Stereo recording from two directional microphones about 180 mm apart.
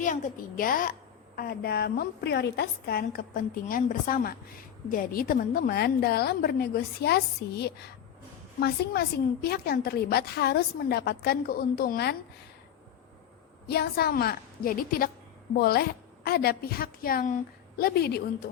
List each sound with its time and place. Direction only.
0.0 s a woman's voice: 50° left (ahead or behind)
1.4 s a woman's voice: 60° left (ahead or behind)
13.7 s a woman's voice: 60° left (ahead or behind)